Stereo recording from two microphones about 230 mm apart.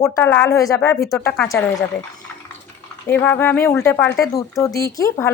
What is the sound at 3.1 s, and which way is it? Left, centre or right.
Speech, centre.